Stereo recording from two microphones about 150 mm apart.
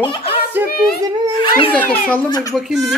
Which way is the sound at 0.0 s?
35° left (ahead or behind).